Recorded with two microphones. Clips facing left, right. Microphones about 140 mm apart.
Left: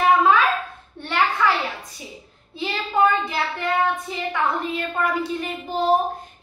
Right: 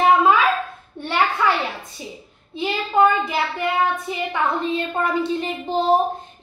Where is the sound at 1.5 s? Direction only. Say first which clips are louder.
Right 1 dB; 25° right (ahead or behind).